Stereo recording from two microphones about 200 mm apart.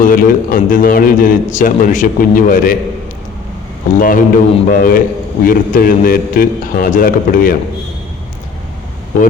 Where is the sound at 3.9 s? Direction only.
45° left (ahead or behind).